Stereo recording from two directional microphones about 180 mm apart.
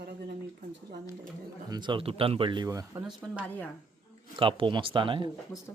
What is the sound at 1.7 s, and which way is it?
Speech, 25° right (ahead or behind).